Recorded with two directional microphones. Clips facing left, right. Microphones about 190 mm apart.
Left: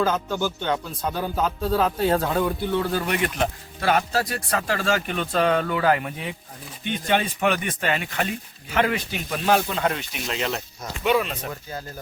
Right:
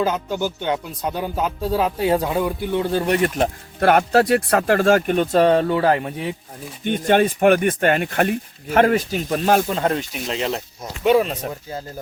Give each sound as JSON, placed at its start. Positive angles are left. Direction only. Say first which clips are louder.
{"t": 0.0, "sound": "speech", "louder": "right 2 dB", "side_deg": -15}
{"t": 2.8, "sound": "speech", "louder": "right 5 dB", "side_deg": -30}
{"t": 3.8, "sound": "speech", "louder": "right 7 dB", "side_deg": -60}
{"t": 6.8, "sound": "speech", "louder": "right 7 dB", "side_deg": -50}